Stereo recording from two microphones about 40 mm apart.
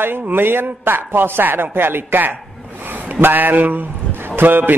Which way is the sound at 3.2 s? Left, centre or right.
Right.